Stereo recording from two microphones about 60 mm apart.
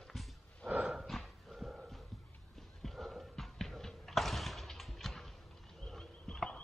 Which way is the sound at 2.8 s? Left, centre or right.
Centre.